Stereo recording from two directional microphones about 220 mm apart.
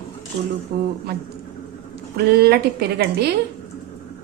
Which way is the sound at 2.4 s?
45° right (ahead or behind).